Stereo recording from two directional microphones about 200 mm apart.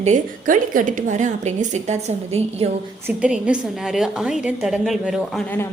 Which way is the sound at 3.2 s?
5° right (ahead or behind).